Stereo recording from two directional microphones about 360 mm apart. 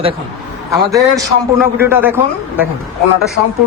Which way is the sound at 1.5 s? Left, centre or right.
Centre.